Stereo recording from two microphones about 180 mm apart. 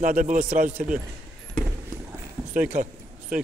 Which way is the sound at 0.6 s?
5° right (ahead or behind).